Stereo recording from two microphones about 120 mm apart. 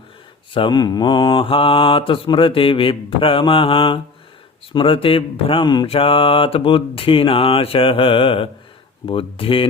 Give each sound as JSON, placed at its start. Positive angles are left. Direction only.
{"t": 0.5, "sound": "mantra", "side_deg": 40}